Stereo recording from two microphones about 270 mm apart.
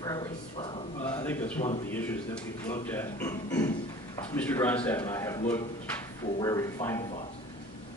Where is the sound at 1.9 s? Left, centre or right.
Centre.